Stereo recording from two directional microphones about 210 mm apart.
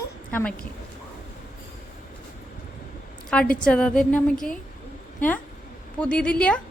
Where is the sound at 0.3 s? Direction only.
10° left (ahead or behind).